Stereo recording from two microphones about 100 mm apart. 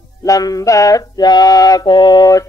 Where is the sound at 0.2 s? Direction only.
35° left (ahead or behind).